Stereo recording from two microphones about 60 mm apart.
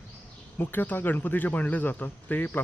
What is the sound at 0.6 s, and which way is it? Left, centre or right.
Speech, left.